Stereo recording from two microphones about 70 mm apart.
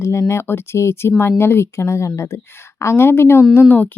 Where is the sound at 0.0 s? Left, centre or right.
Left.